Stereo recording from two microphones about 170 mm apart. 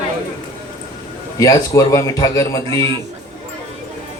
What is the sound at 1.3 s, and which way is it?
A man's voice, 20° left (ahead or behind).